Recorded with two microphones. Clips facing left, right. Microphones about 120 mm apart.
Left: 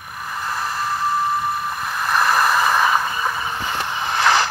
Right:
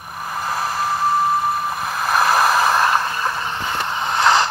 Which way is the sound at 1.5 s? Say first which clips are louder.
Right 2 dB; 5° right (ahead or behind).